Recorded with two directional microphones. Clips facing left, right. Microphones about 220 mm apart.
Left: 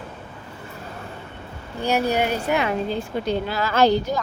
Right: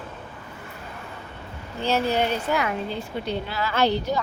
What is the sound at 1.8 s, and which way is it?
Speech, 15° left (ahead or behind).